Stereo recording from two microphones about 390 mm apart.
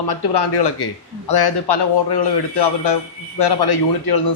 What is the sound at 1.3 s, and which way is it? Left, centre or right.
Speech, left.